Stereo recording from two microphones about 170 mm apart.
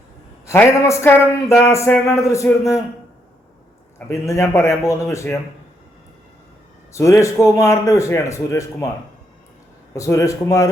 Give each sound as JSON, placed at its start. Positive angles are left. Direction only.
{"t": 0.4, "sound": "speech", "side_deg": 15}
{"t": 3.9, "sound": "speech", "side_deg": 15}
{"t": 6.9, "sound": "speech", "side_deg": 20}
{"t": 9.9, "sound": "speech", "side_deg": 20}